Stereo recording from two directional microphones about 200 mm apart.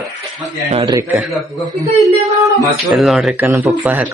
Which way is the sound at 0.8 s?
15° right (ahead or behind).